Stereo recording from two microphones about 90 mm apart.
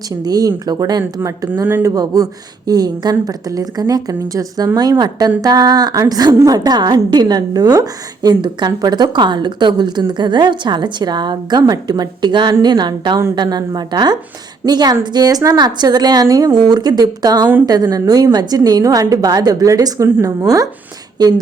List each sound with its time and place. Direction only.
0.3 s a woman's voice: 45° right (ahead or behind)
1.6 s speech: 25° right (ahead or behind)
2.0 s a woman's voice: 45° right (ahead or behind)